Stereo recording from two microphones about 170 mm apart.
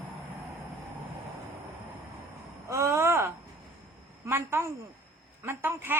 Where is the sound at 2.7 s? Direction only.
15° right (ahead or behind).